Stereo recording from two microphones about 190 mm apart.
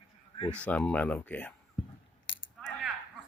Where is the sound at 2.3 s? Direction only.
80° left.